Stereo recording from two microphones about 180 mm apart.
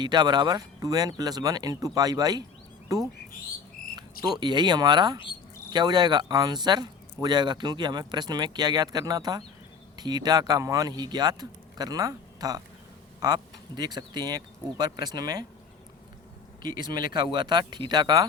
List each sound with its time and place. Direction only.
0.0 s speech: 25° right (ahead or behind)
4.2 s speech: 25° right (ahead or behind)
16.6 s speech: 20° right (ahead or behind)